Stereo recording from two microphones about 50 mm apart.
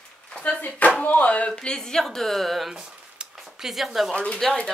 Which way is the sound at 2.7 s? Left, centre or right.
Centre.